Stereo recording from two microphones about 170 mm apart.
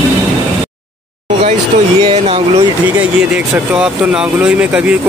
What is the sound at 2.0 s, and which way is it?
Speech, 35° right (ahead or behind).